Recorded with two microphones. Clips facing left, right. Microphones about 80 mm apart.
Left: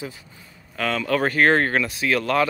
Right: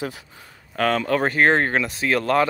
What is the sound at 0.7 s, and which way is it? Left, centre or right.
Speech, right.